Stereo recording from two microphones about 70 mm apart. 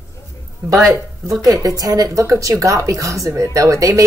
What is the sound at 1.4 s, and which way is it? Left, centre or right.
A woman's voice, right.